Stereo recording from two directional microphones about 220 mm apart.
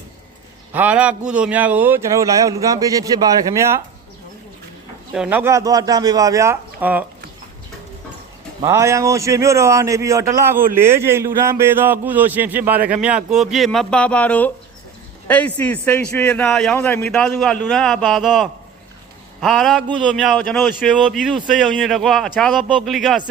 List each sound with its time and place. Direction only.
0.7 s a man's voice: 5° right (ahead or behind)
5.1 s a man's voice: 5° right (ahead or behind)
8.6 s a man's voice: 15° right (ahead or behind)